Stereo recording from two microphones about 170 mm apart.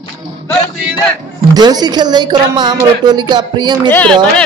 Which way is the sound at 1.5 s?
25° right (ahead or behind).